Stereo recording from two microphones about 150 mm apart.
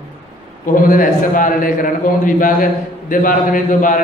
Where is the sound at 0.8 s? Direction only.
65° left (ahead or behind).